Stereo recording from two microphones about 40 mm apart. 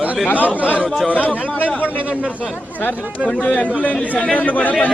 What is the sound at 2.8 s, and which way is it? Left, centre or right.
Speech, left.